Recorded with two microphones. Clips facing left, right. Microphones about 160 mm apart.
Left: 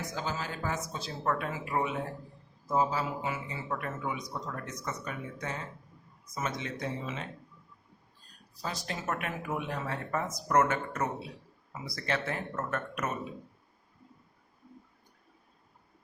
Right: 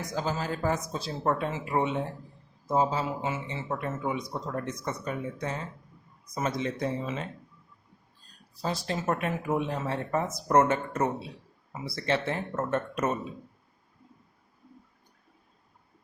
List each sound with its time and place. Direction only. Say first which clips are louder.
0.1 s a man's voice: right 5 dB; 40° right (ahead or behind)
8.6 s a man's voice: right 6 dB; 30° right (ahead or behind)